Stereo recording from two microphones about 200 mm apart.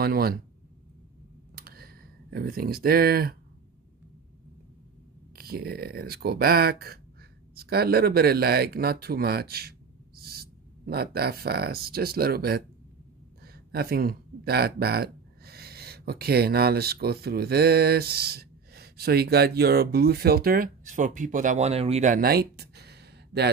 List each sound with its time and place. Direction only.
0.0 s speech: 50° right (ahead or behind)
1.5 s a sound: 50° right (ahead or behind)
5.3 s speech: 50° right (ahead or behind)